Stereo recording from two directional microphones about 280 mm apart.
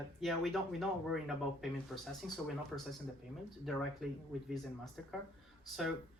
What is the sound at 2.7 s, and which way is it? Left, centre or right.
Speech, centre.